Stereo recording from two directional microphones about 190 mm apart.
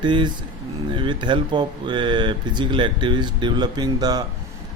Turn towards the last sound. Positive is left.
turn(degrees=-20)  # may be behind; listen again after turning